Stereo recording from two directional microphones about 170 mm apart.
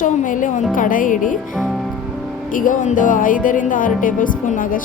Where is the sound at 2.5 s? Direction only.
50° left (ahead or behind).